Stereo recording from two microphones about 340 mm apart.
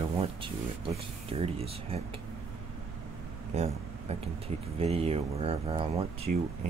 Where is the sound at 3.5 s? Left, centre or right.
Centre.